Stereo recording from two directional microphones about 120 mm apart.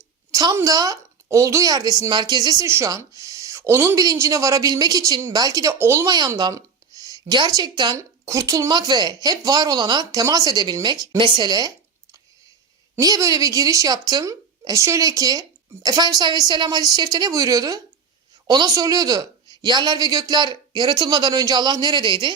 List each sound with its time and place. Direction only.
0.5 s a woman's voice: 30° right (ahead or behind)
6.1 s a woman's voice: 35° right (ahead or behind)
7.9 s a woman's voice: 25° right (ahead or behind)
13.0 s a woman's voice: 30° right (ahead or behind)